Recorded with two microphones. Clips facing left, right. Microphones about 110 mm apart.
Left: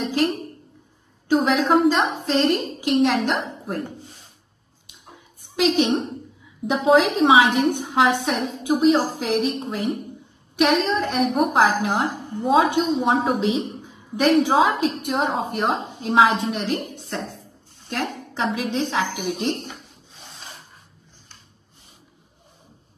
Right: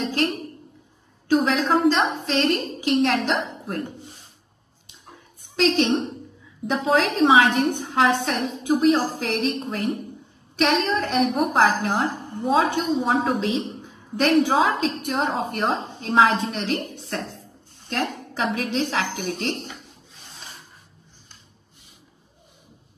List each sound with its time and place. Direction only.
0.0 s a sound: 5° left (ahead or behind)
1.3 s a woman's voice: 15° left (ahead or behind)
1.8 s a woman's voice: 5° left (ahead or behind)
3.6 s speech: 15° left (ahead or behind)
5.0 s a sound: 10° left (ahead or behind)
6.7 s a woman's voice: 15° left (ahead or behind)
10.5 s a woman's voice: 5° left (ahead or behind)
11.5 s a woman's voice: 15° left (ahead or behind)